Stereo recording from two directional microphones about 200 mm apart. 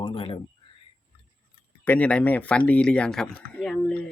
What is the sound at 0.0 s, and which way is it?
Speech, 25° left (ahead or behind).